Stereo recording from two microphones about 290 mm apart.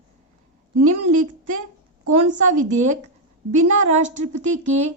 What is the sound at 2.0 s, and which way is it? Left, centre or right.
Speech, right.